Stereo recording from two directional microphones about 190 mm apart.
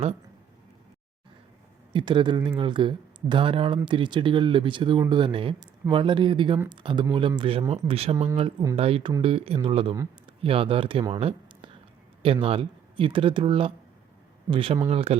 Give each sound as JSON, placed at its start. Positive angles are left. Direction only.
{"t": 1.9, "sound": "speech", "side_deg": -25}
{"t": 11.1, "sound": "a sound", "side_deg": -30}
{"t": 12.2, "sound": "speech", "side_deg": -30}